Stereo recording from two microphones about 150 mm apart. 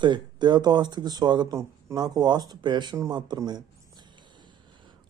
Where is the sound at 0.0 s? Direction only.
30° right (ahead or behind).